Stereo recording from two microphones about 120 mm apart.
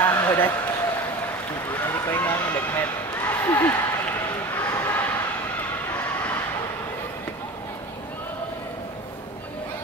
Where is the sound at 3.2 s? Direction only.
15° left (ahead or behind).